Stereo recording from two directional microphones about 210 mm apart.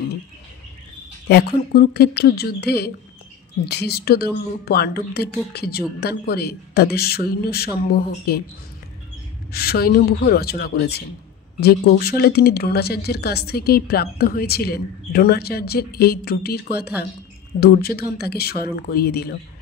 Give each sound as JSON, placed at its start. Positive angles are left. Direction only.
{"t": 1.3, "sound": "a woman's voice", "side_deg": 50}
{"t": 9.5, "sound": "a woman's voice", "side_deg": 45}